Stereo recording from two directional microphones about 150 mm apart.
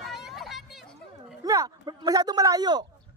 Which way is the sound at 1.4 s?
25° right (ahead or behind).